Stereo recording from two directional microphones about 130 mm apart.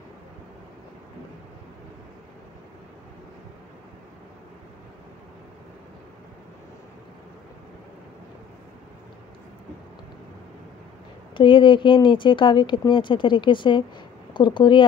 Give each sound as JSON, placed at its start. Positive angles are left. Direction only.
{"t": 11.3, "sound": "speech", "side_deg": 40}